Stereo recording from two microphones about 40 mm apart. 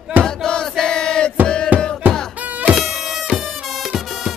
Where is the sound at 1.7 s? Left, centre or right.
Right.